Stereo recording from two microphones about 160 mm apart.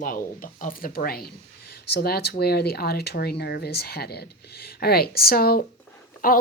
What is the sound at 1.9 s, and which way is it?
Speech, 85° left.